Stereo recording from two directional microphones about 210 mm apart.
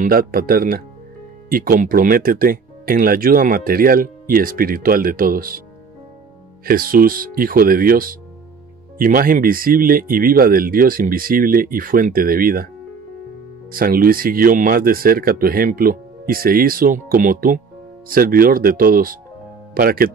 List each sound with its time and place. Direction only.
0.0 s speech: 45° right (ahead or behind)
6.6 s speech: 45° right (ahead or behind)
13.7 s speech: 45° right (ahead or behind)